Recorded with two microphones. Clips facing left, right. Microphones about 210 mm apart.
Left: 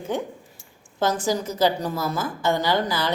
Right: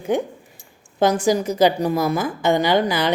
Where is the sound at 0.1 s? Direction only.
15° right (ahead or behind).